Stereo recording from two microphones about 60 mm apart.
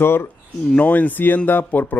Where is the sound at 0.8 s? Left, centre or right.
Left.